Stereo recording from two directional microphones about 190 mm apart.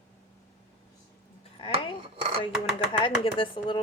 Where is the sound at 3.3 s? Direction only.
25° left (ahead or behind).